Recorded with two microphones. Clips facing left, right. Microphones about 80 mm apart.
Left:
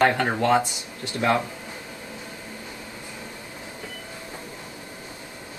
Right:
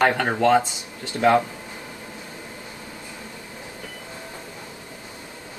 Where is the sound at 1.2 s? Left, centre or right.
Right.